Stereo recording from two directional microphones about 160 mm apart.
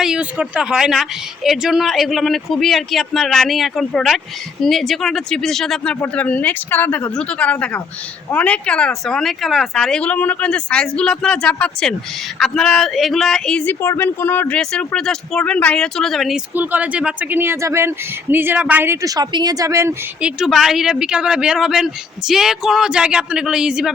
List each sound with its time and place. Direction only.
0.0 s speech: 5° right (ahead or behind)
20.2 s speech: centre (ahead or behind)